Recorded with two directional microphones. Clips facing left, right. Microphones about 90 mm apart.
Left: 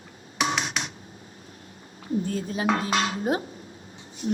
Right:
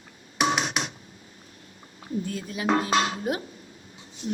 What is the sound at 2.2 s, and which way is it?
Speech, 35° left (ahead or behind).